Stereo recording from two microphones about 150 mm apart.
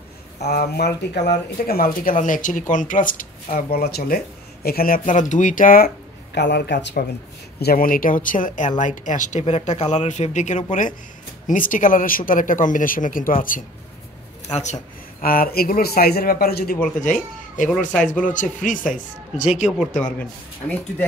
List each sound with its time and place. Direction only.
0.4 s speech: 90° left
1.7 s speech: 75° left (ahead or behind)
3.5 s a man's voice: 90° left; by 5.9 s 65° left (ahead or behind)
6.6 s speech: 90° left
7.6 s speech: 70° left (ahead or behind)
14.5 s speech: 50° left (ahead or behind)
15.2 s a man's voice: 75° left (ahead or behind)
17.0 s speech: 60° left (ahead or behind)
20.0 s speech: 5° left (ahead or behind)